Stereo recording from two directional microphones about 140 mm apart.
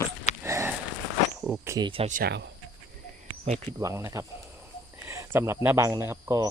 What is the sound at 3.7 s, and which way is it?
Speech, 20° right (ahead or behind).